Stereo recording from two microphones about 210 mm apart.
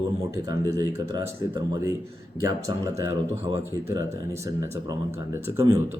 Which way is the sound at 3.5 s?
15° right (ahead or behind).